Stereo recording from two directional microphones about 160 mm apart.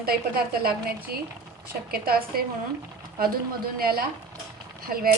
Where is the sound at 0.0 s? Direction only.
70° right (ahead or behind).